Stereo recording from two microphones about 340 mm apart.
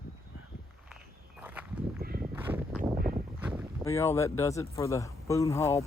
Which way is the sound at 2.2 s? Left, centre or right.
Centre.